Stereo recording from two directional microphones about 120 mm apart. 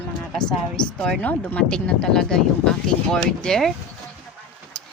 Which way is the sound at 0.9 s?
5° left (ahead or behind).